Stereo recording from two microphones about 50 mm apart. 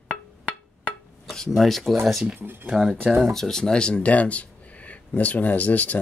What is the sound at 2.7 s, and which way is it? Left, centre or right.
Speech, centre.